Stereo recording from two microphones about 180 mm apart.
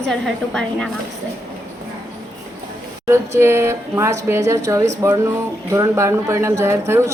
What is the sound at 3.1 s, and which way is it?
Speech, 15° right (ahead or behind).